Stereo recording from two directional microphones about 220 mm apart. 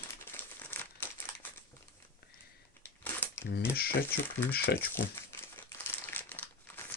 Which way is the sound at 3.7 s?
45° left (ahead or behind).